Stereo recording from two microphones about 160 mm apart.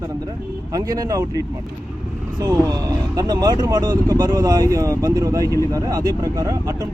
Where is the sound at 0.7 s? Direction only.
25° right (ahead or behind).